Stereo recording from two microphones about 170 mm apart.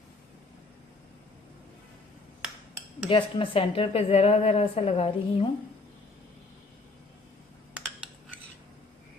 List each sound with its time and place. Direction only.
3.1 s speech: 30° left (ahead or behind)
7.8 s cutlery: 10° right (ahead or behind)